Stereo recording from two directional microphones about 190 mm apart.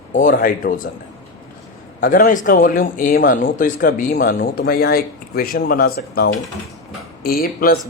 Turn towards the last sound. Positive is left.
turn(degrees=50)  # may be behind; listen again after turning